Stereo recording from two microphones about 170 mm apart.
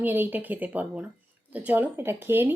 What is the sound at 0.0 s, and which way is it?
A woman's voice, 10° right (ahead or behind).